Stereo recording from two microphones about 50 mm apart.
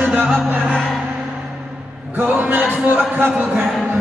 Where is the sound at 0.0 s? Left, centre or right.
Right.